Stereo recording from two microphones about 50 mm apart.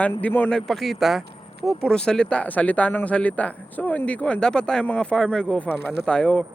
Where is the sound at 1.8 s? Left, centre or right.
Centre.